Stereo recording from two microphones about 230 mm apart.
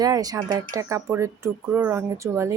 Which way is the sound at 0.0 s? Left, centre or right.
Centre.